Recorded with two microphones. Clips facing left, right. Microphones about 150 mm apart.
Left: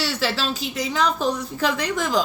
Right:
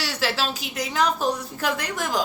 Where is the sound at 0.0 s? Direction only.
10° right (ahead or behind).